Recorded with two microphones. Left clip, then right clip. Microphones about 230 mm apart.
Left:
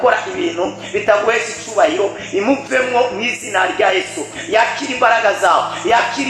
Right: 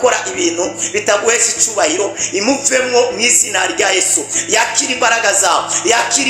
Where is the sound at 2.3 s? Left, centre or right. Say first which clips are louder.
Right 1 dB; right.